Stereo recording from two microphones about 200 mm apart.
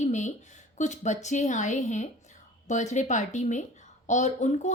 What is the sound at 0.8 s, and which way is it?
A woman's voice, 35° left (ahead or behind).